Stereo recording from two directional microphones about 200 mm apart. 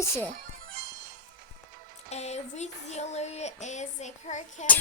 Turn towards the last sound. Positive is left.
turn(degrees=35)  # may be behind; listen again after turning